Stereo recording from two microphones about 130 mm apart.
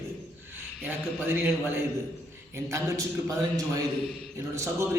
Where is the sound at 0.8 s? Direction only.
15° right (ahead or behind).